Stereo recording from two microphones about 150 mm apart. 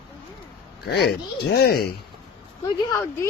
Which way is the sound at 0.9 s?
90° left.